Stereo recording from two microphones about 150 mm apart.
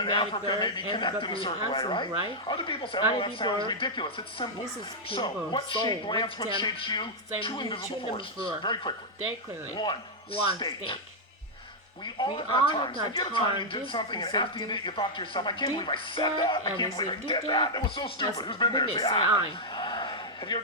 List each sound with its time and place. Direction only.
0.0 s speech: 30° left (ahead or behind)
12.2 s speech: 30° left (ahead or behind)
19.7 s a sound: 30° left (ahead or behind)